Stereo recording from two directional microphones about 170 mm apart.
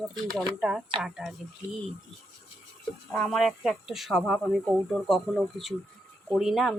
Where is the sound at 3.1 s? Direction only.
5° left (ahead or behind).